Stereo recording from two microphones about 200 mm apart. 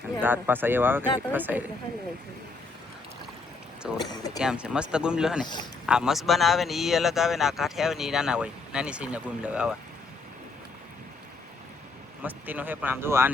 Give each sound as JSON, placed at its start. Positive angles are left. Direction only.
{"t": 0.2, "sound": "speech", "side_deg": -10}
{"t": 3.9, "sound": "speech", "side_deg": 20}
{"t": 4.4, "sound": "speech", "side_deg": -5}
{"t": 12.2, "sound": "speech", "side_deg": -10}